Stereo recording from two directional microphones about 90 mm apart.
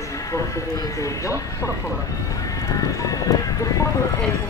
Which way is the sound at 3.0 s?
40° left (ahead or behind).